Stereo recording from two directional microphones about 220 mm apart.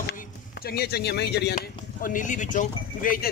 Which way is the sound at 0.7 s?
45° left (ahead or behind).